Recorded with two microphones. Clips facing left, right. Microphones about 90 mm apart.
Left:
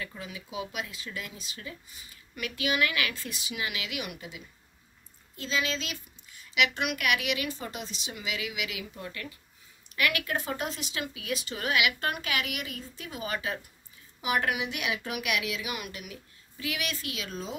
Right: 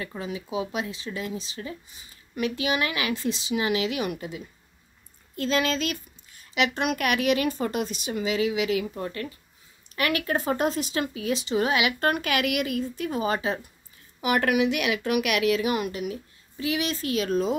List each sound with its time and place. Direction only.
0.0 s speech: 30° right (ahead or behind)
5.3 s speech: 55° right (ahead or behind)
6.5 s speech: 35° right (ahead or behind); by 8.2 s 50° right (ahead or behind)
8.2 s speech: 35° right (ahead or behind)
12.0 s speech: 50° right (ahead or behind); by 13.1 s 70° right (ahead or behind)
13.1 s speech: 30° right (ahead or behind)
14.2 s speech: 70° right (ahead or behind)
15.6 s speech: 35° right (ahead or behind)